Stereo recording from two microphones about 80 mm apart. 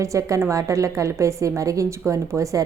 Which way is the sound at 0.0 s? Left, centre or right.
Right.